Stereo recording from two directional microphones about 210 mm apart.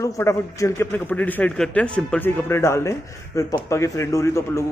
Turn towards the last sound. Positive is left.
turn(degrees=15)  # may be behind; listen again after turning